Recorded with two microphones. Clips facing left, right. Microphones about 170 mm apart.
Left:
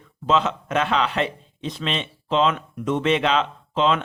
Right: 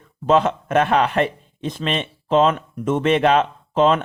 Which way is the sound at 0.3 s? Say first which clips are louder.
Right 4 dB; 50° right (ahead or behind).